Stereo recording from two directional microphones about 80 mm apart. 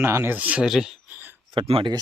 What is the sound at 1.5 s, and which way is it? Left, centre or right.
Speech, right.